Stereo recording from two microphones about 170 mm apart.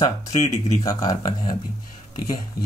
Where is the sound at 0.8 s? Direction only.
20° left (ahead or behind).